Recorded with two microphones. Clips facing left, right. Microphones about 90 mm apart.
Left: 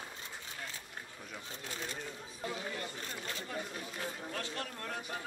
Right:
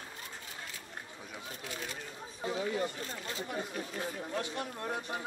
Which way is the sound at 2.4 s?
25° right (ahead or behind).